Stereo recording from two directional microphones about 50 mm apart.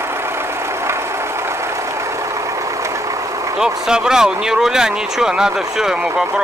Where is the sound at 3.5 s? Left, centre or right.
Centre.